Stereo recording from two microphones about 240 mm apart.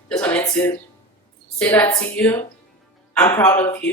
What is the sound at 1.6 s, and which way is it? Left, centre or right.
Speech, centre.